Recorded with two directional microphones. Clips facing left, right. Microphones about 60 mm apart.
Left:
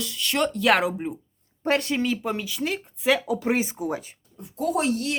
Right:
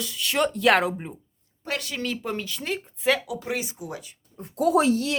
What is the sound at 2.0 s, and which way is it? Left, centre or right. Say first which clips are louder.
Speech: left 4 dB; centre.